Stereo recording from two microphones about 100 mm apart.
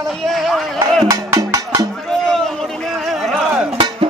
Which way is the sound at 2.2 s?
5° left (ahead or behind).